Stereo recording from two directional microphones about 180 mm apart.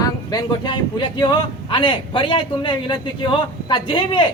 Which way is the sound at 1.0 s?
25° left (ahead or behind).